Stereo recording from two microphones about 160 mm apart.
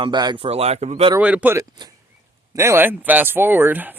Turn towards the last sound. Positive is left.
turn(degrees=-10)  # may be behind; listen again after turning